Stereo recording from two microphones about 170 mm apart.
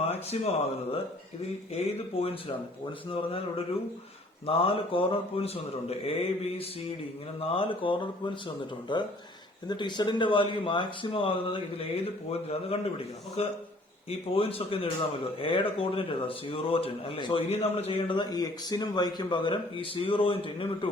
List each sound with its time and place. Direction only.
0.0 s speech: 40° left (ahead or behind)
2.1 s speech: 35° left (ahead or behind)
4.4 s speech: 30° left (ahead or behind)